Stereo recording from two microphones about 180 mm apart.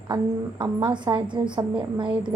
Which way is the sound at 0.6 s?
25° right (ahead or behind).